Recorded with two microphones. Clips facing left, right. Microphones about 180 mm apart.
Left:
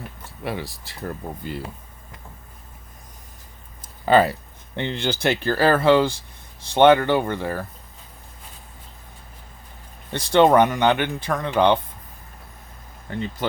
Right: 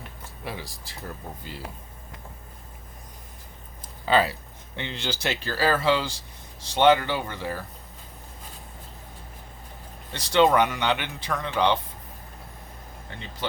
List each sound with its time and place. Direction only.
0.4 s speech: 60° left (ahead or behind)
4.0 s speech: 50° left (ahead or behind)
10.1 s speech: 50° left (ahead or behind)
13.1 s speech: 45° left (ahead or behind)